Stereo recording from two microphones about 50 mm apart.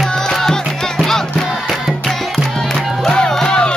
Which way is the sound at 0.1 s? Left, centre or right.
Centre.